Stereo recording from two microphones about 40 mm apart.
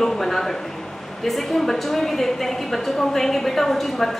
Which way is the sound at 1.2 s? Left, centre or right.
Centre.